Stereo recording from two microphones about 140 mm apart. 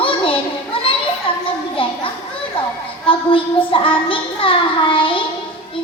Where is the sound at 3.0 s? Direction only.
40° left (ahead or behind).